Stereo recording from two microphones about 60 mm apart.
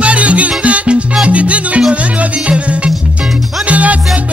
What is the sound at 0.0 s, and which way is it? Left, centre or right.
Music, right.